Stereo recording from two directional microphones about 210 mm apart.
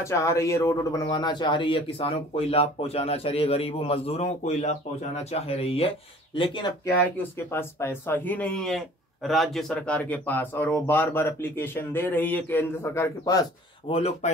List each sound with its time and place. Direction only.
0.0 s speech: 15° left (ahead or behind)
7.0 s speech: 10° left (ahead or behind)
13.9 s speech: 30° left (ahead or behind)